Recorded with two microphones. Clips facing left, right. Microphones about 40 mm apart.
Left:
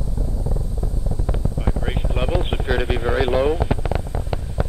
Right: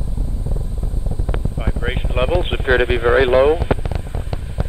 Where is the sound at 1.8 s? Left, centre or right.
Right.